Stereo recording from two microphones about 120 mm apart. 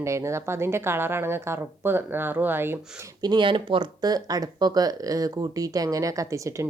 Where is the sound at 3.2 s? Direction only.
40° right (ahead or behind).